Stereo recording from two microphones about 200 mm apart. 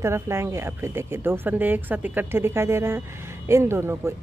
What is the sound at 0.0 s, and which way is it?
Speech, 15° right (ahead or behind).